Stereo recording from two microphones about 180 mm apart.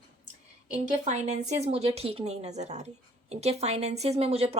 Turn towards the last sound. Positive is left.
turn(degrees=-35)  # may be behind; listen again after turning